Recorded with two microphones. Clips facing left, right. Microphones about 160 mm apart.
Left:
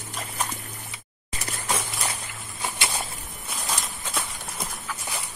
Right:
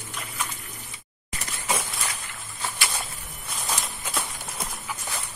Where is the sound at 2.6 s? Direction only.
15° left (ahead or behind).